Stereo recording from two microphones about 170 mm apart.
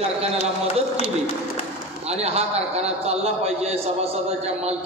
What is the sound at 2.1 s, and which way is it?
A man's voice, 35° right (ahead or behind).